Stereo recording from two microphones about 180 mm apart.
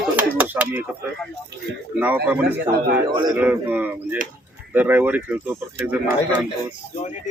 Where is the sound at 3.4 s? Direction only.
10° right (ahead or behind).